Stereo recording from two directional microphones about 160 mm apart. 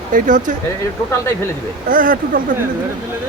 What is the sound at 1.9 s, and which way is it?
Speech, 60° right (ahead or behind).